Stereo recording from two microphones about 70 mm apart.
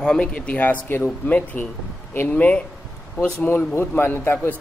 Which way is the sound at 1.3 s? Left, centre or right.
Left.